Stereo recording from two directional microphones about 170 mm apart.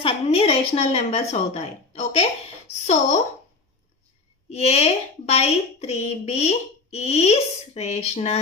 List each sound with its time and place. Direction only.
0.0 s a woman's voice: 35° left (ahead or behind)
4.5 s a woman's voice: 40° left (ahead or behind)